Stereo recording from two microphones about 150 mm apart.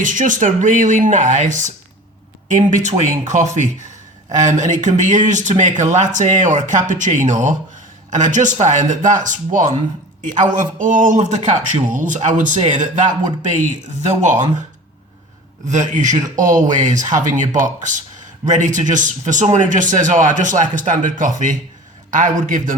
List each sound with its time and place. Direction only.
0.0 s speech: 60° right (ahead or behind)
14.1 s speech: 50° right (ahead or behind)
15.6 s speech: 55° right (ahead or behind)